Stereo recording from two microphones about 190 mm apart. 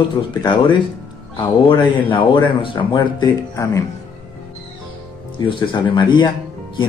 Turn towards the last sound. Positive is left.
turn(degrees=25)  # may be behind; listen again after turning